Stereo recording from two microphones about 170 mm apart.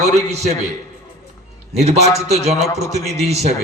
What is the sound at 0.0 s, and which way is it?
Speech, 40° right (ahead or behind).